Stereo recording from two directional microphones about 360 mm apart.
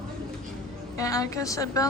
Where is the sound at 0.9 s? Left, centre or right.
Centre.